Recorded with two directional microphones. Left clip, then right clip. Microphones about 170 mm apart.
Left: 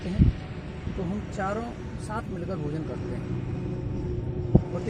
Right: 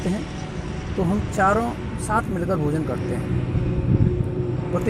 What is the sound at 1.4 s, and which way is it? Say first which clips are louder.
Speech: right 12 dB; 55° right (ahead or behind).